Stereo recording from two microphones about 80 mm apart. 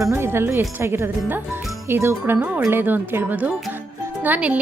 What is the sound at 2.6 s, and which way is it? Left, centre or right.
A woman's voice, right.